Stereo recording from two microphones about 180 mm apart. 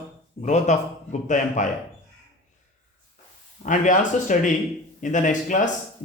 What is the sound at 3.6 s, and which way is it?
Speech, 45° left (ahead or behind).